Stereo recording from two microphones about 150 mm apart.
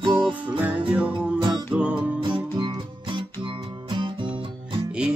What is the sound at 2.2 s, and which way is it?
Music, 35° right (ahead or behind).